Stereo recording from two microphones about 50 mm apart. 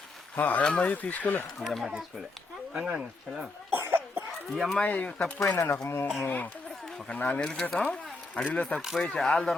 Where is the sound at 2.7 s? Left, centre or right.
Centre.